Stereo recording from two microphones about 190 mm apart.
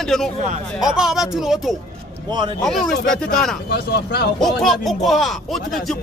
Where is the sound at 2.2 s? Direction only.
25° right (ahead or behind).